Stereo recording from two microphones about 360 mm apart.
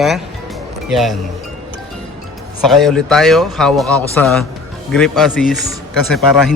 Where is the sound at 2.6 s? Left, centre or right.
Centre.